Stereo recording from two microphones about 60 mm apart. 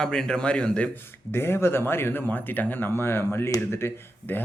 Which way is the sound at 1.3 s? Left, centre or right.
Left.